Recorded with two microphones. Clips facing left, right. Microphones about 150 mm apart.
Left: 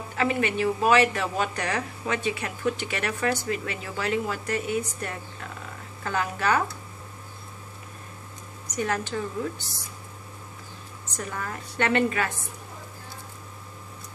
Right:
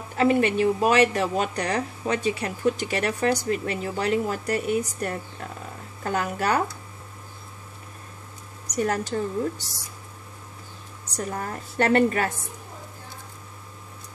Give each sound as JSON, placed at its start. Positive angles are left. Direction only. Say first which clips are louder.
{"t": 0.2, "sound": "speech", "louder": "right 5 dB", "side_deg": -40}
{"t": 8.7, "sound": "speech", "louder": "right 3 dB", "side_deg": -35}
{"t": 11.1, "sound": "speech", "louder": "right 3 dB", "side_deg": -35}